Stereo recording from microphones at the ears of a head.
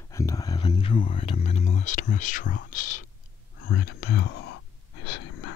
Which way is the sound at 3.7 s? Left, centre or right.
Left.